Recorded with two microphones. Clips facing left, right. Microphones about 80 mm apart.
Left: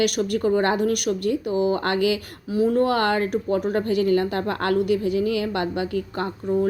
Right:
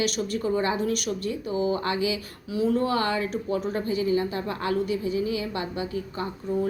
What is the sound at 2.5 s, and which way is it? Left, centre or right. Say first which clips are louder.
Speech: left 4 dB; left.